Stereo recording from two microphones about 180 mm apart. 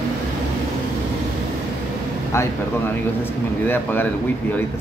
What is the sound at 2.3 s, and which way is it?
Speech, 15° left (ahead or behind).